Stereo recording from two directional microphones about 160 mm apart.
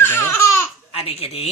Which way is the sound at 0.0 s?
15° left (ahead or behind).